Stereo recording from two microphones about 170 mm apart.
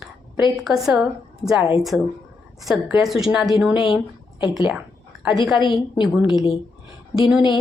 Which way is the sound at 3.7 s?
30° left (ahead or behind).